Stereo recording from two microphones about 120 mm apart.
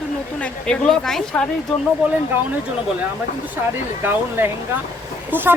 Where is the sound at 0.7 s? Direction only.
5° left (ahead or behind).